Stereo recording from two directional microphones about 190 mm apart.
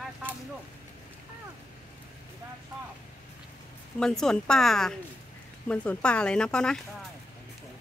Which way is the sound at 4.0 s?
5° left (ahead or behind).